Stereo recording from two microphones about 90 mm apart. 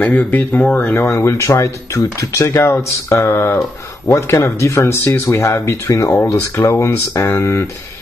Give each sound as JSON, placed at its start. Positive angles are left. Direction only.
{"t": 0.0, "sound": "speech", "side_deg": 20}
{"t": 1.0, "sound": "speech", "side_deg": 30}